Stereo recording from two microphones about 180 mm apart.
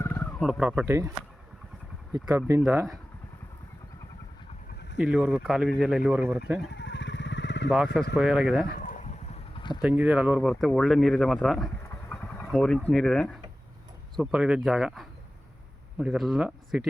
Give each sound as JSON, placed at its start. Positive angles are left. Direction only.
{"t": 0.0, "sound": "bird", "side_deg": 10}
{"t": 0.4, "sound": "speech", "side_deg": 0}
{"t": 2.1, "sound": "speech", "side_deg": -20}
{"t": 4.9, "sound": "speech", "side_deg": -5}
{"t": 6.7, "sound": "vehicle", "side_deg": 75}
{"t": 8.1, "sound": "speech", "side_deg": 0}
{"t": 9.8, "sound": "speech", "side_deg": -10}